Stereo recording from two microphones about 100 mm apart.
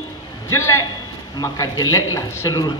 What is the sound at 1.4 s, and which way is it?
A man's voice, 40° left (ahead or behind).